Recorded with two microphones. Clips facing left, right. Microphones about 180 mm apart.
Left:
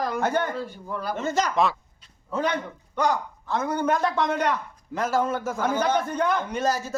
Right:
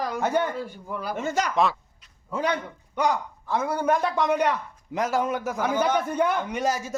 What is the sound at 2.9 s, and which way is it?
A man's voice, 15° right (ahead or behind).